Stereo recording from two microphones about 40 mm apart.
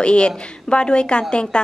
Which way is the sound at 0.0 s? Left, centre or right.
Left.